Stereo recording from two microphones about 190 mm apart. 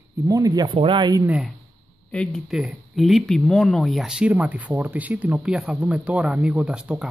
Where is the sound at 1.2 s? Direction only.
5° right (ahead or behind).